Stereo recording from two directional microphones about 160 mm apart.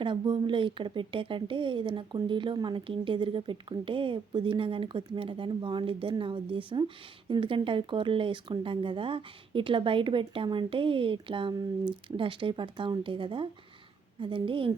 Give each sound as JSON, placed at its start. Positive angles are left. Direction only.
{"t": 0.0, "sound": "speech", "side_deg": -30}